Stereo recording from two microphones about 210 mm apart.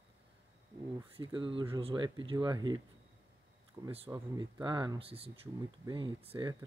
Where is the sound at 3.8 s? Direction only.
20° right (ahead or behind).